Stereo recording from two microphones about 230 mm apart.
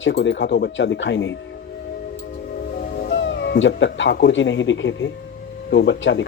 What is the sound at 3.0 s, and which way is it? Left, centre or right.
Speech, left.